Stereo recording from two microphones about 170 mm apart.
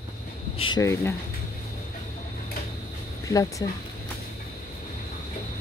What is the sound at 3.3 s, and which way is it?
Speech, 20° left (ahead or behind).